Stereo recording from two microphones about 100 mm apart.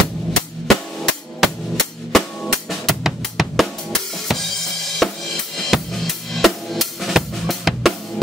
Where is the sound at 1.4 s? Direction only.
Centre (ahead or behind).